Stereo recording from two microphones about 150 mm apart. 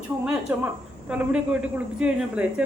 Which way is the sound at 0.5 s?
10° right (ahead or behind).